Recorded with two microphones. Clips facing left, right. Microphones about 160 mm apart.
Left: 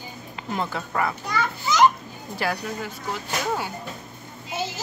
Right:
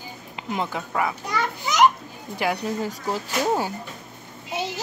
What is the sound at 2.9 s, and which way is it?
Speech, 40° right (ahead or behind).